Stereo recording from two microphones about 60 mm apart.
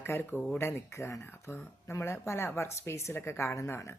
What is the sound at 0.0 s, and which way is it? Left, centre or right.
Speech, left.